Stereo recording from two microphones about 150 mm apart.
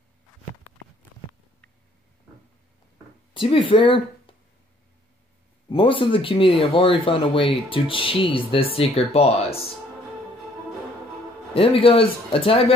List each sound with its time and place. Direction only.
3.3 s speech: 35° left (ahead or behind)
5.7 s speech: 35° left (ahead or behind)
11.5 s speech: 40° left (ahead or behind)